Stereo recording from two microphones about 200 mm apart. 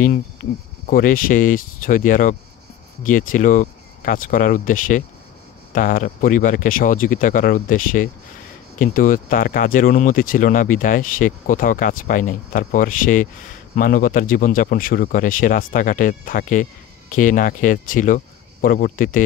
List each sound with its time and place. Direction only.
0.8 s speech: 45° left (ahead or behind)